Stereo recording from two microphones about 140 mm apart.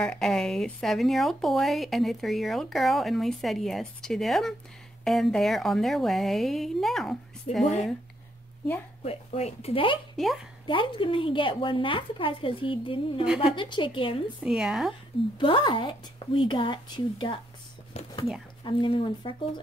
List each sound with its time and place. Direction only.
0.0 s speech: 5° left (ahead or behind)
7.5 s speech: 50° left (ahead or behind)
9.0 s speech: 45° left (ahead or behind)
10.1 s speech: centre (ahead or behind)
10.7 s speech: 35° left (ahead or behind)
13.2 s speech: 5° right (ahead or behind)
13.6 s speech: 35° left (ahead or behind)
14.4 s speech: 5° right (ahead or behind)
15.3 s speech: 35° left (ahead or behind)
17.9 s a sound: 50° left (ahead or behind)
18.6 s speech: 35° left (ahead or behind)